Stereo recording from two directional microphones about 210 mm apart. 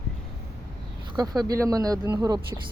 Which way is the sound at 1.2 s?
20° right (ahead or behind).